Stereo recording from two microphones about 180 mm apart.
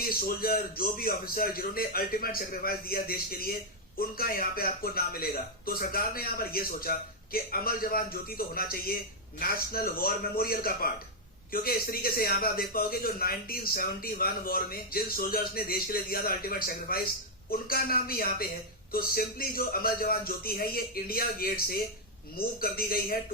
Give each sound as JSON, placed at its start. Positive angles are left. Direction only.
{"t": 0.0, "sound": "speech", "side_deg": 55}